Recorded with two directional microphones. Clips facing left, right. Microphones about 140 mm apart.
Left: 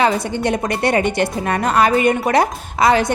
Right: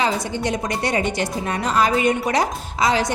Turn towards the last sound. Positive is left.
turn(degrees=55)  # may be behind; listen again after turning